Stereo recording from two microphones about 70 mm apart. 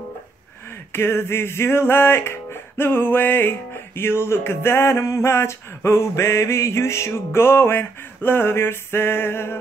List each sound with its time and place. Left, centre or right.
0.7 s music: left